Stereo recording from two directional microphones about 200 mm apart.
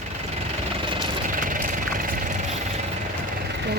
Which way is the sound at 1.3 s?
40° right (ahead or behind).